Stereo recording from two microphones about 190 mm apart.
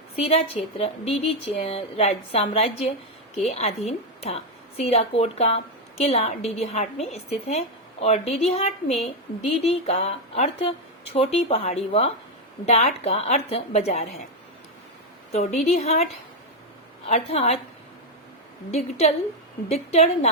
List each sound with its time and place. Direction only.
0.2 s a woman's voice: 30° left (ahead or behind)
15.3 s a woman's voice: 40° left (ahead or behind)
17.1 s a woman's voice: 35° left (ahead or behind)
18.7 s a woman's voice: 35° left (ahead or behind)